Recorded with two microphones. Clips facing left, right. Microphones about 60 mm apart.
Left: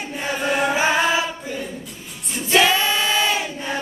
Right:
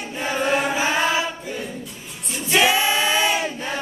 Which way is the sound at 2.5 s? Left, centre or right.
Centre.